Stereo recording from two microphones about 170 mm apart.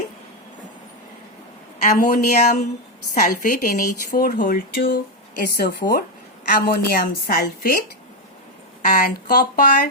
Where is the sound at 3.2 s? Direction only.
50° left (ahead or behind); by 6.0 s 65° left (ahead or behind).